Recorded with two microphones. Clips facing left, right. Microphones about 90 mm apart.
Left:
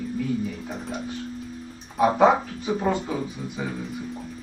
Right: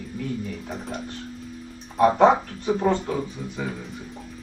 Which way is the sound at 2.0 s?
5° left (ahead or behind).